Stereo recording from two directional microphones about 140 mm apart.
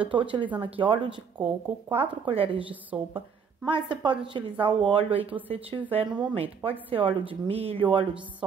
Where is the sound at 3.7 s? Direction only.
35° right (ahead or behind).